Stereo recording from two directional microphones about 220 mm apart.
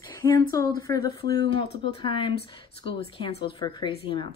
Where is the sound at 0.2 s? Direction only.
15° left (ahead or behind).